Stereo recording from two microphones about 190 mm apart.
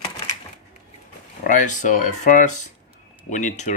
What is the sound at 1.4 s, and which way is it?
Speech, 45° left (ahead or behind).